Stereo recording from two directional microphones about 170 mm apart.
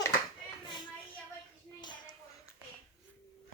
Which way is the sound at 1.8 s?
25° left (ahead or behind).